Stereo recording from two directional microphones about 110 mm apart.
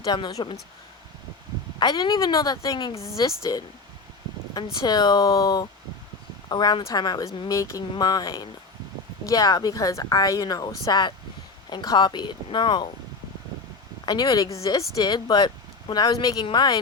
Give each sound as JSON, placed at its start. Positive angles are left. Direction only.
{"t": 0.0, "sound": "speech", "side_deg": 40}
{"t": 1.8, "sound": "speech", "side_deg": 40}
{"t": 4.5, "sound": "speech", "side_deg": 40}
{"t": 14.0, "sound": "speech", "side_deg": 45}
{"t": 14.9, "sound": "speech", "side_deg": 40}